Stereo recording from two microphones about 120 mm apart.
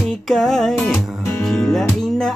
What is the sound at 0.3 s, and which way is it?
Music, centre (ahead or behind).